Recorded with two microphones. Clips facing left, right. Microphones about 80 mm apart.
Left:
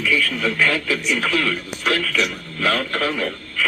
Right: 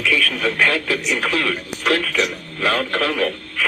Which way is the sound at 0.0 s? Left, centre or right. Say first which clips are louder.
Right 1 dB; right.